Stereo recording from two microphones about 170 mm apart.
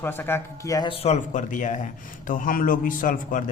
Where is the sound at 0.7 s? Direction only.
35° left (ahead or behind).